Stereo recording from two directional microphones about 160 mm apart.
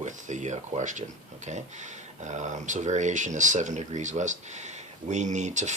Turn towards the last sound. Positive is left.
turn(degrees=-45)  # may be behind; listen again after turning